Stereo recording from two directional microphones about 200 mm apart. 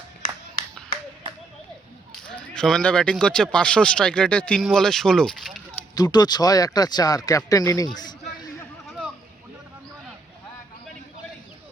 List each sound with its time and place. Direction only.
2.3 s speech: 5° left (ahead or behind)
5.9 s speech: 20° left (ahead or behind)
8.9 s a sound: centre (ahead or behind)